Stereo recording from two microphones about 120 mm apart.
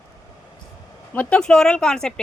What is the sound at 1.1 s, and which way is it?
A woman's voice, 10° left (ahead or behind).